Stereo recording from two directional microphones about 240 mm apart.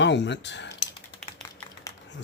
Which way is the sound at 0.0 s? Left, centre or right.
Left.